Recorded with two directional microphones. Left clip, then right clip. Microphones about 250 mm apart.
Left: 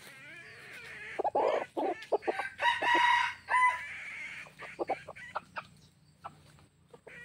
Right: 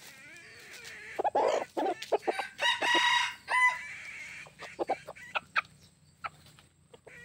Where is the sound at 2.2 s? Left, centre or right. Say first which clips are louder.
Left 1 dB; right.